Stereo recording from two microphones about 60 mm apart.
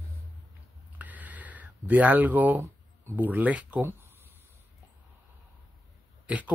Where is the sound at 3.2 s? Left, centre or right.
Right.